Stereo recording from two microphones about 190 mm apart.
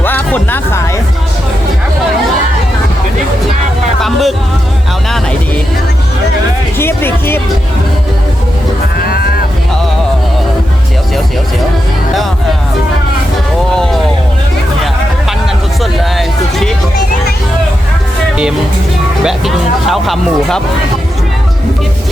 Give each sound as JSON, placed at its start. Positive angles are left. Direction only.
{"t": 0.0, "sound": "music", "side_deg": 10}
{"t": 4.0, "sound": "music", "side_deg": 0}
{"t": 6.7, "sound": "music", "side_deg": 10}
{"t": 9.0, "sound": "a sound", "side_deg": 55}
{"t": 15.8, "sound": "music", "side_deg": 0}
{"t": 19.2, "sound": "music", "side_deg": 0}